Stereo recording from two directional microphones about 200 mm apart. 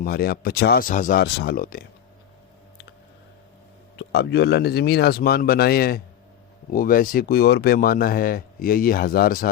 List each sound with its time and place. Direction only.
0.0 s speech: 50° left (ahead or behind)
3.9 s speech: 55° left (ahead or behind)